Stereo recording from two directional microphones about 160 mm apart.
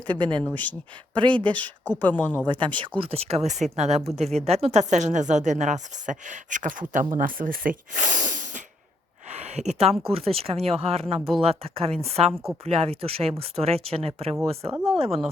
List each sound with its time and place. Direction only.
0.1 s speech: 30° right (ahead or behind)
0.4 s speech: 10° left (ahead or behind)
1.1 s speech: 30° right (ahead or behind)
1.8 s speech: 10° left (ahead or behind)
2.5 s a woman's voice: 30° right (ahead or behind); by 8.6 s 55° right (ahead or behind)
9.3 s a sound: 45° right (ahead or behind)
10.0 s speech: 40° right (ahead or behind)